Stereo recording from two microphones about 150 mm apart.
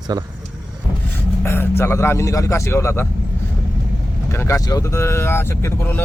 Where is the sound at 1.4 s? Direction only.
15° left (ahead or behind).